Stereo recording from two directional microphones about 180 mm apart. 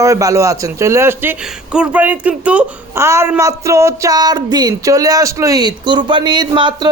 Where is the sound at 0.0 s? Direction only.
20° right (ahead or behind).